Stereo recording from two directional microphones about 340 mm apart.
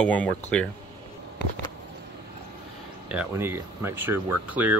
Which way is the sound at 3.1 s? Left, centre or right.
Centre.